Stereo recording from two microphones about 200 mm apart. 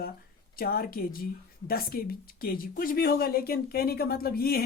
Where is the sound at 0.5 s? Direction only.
50° left (ahead or behind).